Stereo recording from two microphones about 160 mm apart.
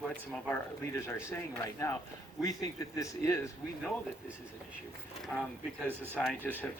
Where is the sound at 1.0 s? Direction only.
15° left (ahead or behind).